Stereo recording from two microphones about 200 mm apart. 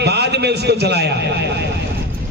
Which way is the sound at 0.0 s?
55° right (ahead or behind).